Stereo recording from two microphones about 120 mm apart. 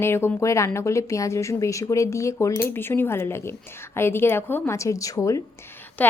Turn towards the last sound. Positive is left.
turn(degrees=15)  # may be behind; listen again after turning